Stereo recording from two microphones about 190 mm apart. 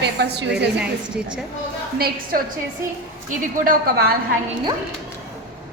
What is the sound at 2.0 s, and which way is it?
Speech, 55° right (ahead or behind).